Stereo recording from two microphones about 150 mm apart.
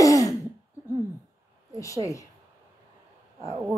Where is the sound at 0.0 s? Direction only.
20° left (ahead or behind).